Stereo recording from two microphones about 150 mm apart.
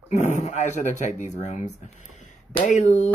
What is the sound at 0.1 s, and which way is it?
Speech, 55° left (ahead or behind).